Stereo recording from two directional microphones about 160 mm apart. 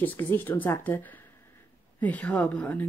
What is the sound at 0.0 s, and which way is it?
Speech, 10° left (ahead or behind).